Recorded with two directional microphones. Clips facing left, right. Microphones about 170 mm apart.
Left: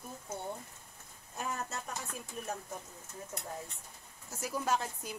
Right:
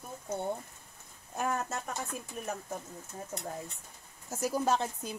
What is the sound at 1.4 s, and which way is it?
Speech, 55° right (ahead or behind).